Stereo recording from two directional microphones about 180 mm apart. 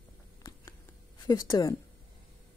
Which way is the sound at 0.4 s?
20° left (ahead or behind).